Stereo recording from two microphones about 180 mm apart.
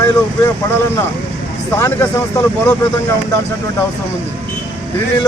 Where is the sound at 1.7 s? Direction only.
15° left (ahead or behind).